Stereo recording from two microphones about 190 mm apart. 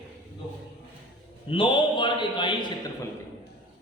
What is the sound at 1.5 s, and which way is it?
A man's voice, 25° left (ahead or behind).